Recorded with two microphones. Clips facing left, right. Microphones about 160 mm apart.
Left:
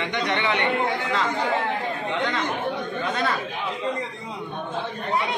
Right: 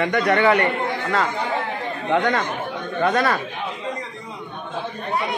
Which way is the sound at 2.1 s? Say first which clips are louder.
Right 8 dB; 55° right (ahead or behind).